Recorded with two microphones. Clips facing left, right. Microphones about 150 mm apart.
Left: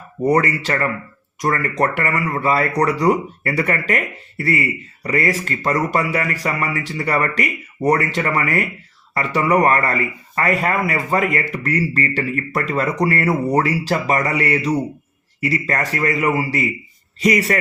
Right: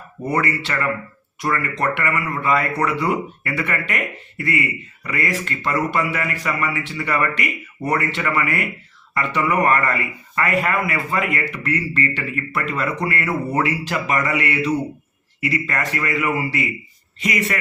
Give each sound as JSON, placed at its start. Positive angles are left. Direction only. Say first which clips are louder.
{"t": 0.3, "sound": "speech", "louder": "left 5 dB", "side_deg": 40}